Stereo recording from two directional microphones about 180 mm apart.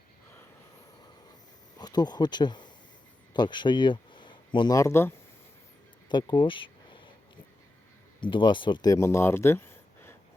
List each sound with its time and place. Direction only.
1.8 s speech: 20° left (ahead or behind)
6.1 s a sound: 25° left (ahead or behind)
8.2 s speech: 25° left (ahead or behind)